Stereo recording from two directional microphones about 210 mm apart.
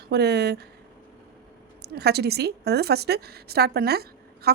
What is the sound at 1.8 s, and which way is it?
A woman's voice, 50° right (ahead or behind).